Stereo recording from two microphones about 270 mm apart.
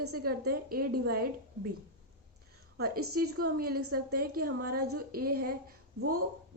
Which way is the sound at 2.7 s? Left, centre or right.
Right.